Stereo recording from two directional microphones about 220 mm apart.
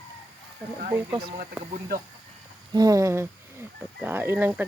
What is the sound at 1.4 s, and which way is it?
Speech, 40° right (ahead or behind).